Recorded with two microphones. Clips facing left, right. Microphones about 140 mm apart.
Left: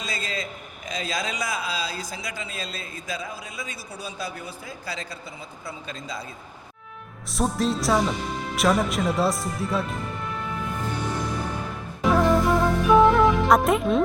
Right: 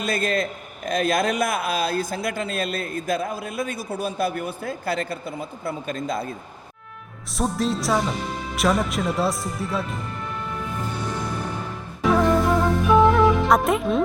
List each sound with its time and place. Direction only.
0.0 s a man's voice: 55° right (ahead or behind)
7.3 s speech: centre (ahead or behind)
12.0 s music: centre (ahead or behind)